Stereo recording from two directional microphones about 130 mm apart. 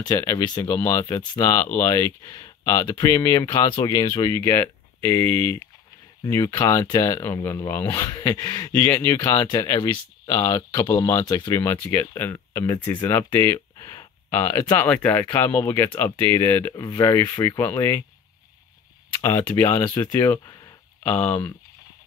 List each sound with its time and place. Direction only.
0.0 s speech: 30° left (ahead or behind)
3.6 s speech: 35° left (ahead or behind); by 5.6 s 15° left (ahead or behind)
6.2 s speech: 25° left (ahead or behind)
19.4 s speech: 20° left (ahead or behind)